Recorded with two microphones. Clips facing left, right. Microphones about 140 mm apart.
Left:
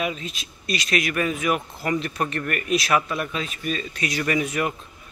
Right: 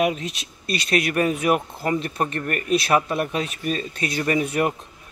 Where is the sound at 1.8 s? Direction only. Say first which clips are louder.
Right 1 dB; 30° right (ahead or behind).